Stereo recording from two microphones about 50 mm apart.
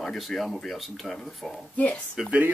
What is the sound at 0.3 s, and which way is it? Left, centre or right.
Speech, centre.